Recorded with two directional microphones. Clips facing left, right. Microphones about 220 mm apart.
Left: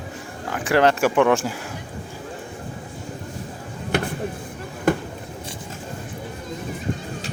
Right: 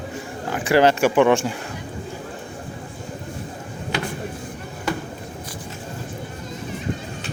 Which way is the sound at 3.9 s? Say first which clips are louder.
Left 4 dB; 55° left (ahead or behind).